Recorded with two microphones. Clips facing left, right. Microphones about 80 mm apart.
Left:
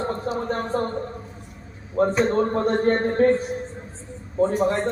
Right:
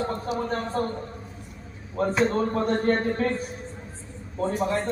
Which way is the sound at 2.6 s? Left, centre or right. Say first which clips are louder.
Left 3 dB; left.